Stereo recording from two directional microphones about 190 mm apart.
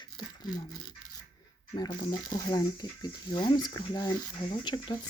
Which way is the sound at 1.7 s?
20° left (ahead or behind).